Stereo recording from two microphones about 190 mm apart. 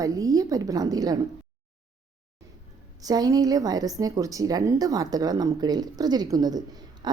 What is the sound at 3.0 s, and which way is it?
A woman's voice, 20° right (ahead or behind).